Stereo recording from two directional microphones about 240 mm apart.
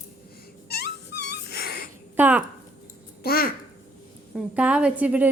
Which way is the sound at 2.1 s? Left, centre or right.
Centre.